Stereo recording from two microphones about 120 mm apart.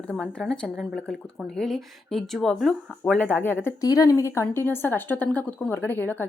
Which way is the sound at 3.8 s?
30° left (ahead or behind).